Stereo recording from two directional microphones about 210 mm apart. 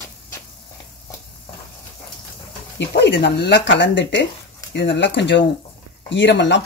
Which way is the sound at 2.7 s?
55° left (ahead or behind).